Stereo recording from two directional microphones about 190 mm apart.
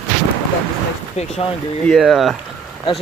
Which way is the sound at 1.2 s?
40° left (ahead or behind).